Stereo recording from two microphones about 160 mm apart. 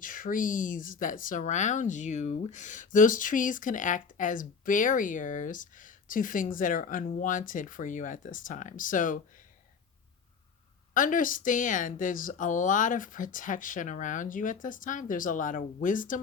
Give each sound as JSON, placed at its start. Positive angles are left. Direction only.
{"t": 0.0, "sound": "speech", "side_deg": 60}
{"t": 10.9, "sound": "speech", "side_deg": 55}